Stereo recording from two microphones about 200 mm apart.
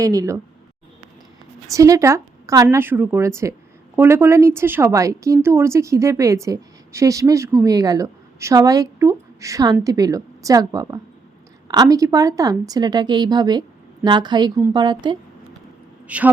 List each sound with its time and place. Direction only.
0.0 s speech: 15° right (ahead or behind)
1.7 s a woman's voice: 15° right (ahead or behind)
16.0 s a man's voice: 5° right (ahead or behind)